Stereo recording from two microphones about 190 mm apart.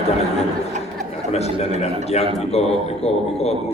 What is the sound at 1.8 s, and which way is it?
A man's voice, 35° left (ahead or behind).